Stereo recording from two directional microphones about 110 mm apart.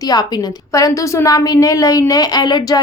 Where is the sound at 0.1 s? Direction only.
35° left (ahead or behind).